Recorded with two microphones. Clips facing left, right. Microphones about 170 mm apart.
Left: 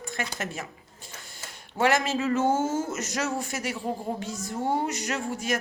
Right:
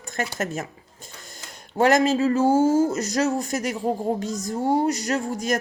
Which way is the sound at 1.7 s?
40° right (ahead or behind).